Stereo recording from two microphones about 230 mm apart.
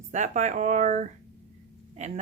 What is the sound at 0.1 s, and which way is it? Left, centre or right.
Speech, right.